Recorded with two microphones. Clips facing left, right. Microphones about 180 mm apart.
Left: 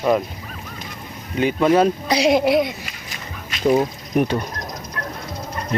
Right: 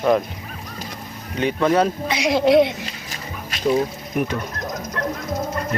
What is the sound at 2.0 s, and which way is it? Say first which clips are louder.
Speech: left 4 dB; 35° left (ahead or behind).